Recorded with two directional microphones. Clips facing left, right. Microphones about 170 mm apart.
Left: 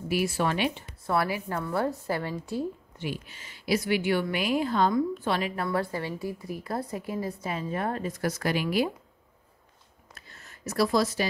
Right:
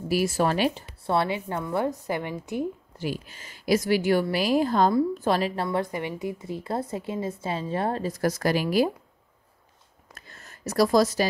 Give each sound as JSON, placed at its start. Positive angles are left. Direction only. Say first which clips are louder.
{"t": 0.1, "sound": "a woman's voice", "louder": "right 3 dB", "side_deg": -40}
{"t": 3.0, "sound": "speech", "louder": "right 4 dB", "side_deg": -40}
{"t": 10.1, "sound": "a sound", "louder": "right 3 dB", "side_deg": -45}